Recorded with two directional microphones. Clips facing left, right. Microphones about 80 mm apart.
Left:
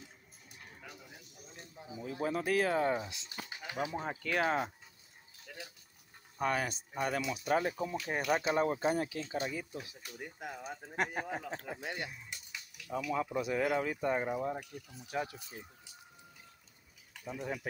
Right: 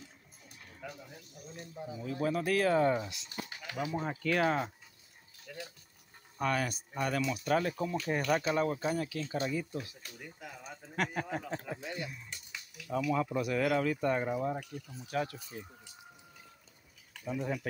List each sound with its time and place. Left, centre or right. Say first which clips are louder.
2.0 s speech: right 2 dB; centre
3.1 s speech: right 2 dB; left
6.4 s speech: right 1 dB; centre
9.2 s speech: right 3 dB; centre
11.8 s speech: even; left
12.8 s speech: right 3 dB; centre
17.2 s speech: right 4 dB; centre